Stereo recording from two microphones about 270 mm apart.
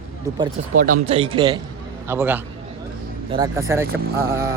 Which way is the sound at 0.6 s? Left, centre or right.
Right.